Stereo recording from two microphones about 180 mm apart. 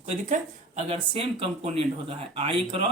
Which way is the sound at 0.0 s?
40° right (ahead or behind).